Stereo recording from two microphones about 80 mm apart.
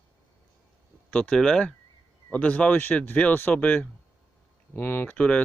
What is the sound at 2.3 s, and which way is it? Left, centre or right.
Speech, centre.